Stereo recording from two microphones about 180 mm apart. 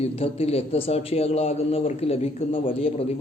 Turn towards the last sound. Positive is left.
turn(degrees=35)  # may be behind; listen again after turning